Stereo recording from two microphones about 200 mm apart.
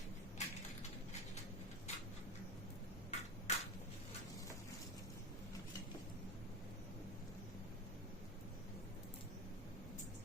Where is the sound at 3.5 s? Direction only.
35° left (ahead or behind).